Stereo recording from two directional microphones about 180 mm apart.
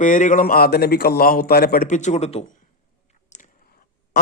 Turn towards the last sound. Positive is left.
turn(degrees=40)  # may be behind; listen again after turning